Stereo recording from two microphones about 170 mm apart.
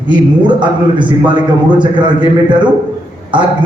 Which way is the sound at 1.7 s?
30° right (ahead or behind).